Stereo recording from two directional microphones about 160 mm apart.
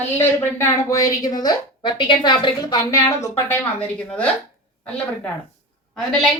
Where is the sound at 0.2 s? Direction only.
20° left (ahead or behind).